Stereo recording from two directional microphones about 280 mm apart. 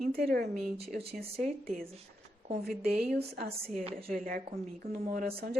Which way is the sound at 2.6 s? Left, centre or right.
Right.